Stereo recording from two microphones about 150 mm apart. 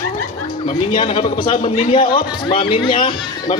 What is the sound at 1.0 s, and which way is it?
Speech, 35° left (ahead or behind).